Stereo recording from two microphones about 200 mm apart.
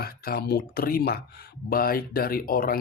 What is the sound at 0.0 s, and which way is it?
Speech, 50° left (ahead or behind).